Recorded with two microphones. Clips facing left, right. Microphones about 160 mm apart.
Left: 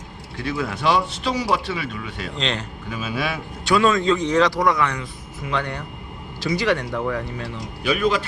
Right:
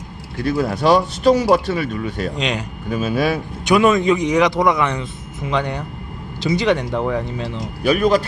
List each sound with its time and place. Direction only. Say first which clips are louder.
0.4 s speech: right 6 dB; 40° right (ahead or behind)
2.3 s a man's voice: right 4 dB; 10° right (ahead or behind)
2.9 s speech: right 8 dB; 40° right (ahead or behind)
3.6 s a man's voice: right 4 dB; 20° right (ahead or behind)
7.9 s speech: right 5 dB; 45° right (ahead or behind)